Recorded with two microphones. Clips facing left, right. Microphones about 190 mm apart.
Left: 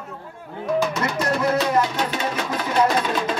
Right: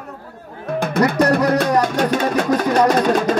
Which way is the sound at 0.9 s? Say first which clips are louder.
Right 8 dB; 55° right (ahead or behind).